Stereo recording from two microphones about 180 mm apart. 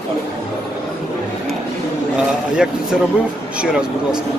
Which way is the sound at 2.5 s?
5° right (ahead or behind).